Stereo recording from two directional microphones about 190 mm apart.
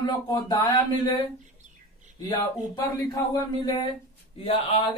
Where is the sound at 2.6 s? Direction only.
20° left (ahead or behind).